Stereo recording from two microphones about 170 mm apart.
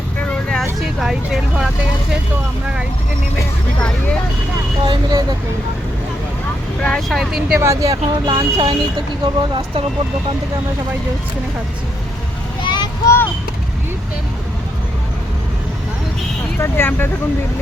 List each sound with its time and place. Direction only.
0.2 s vehicle: 5° left (ahead or behind)
3.8 s speech: 5° left (ahead or behind)
4.9 s speech: 25° right (ahead or behind)
6.8 s speech: 5° left (ahead or behind)
7.6 s speech: 20° right (ahead or behind)
12.6 s vehicle: 25° left (ahead or behind)
16.6 s speech: 15° left (ahead or behind)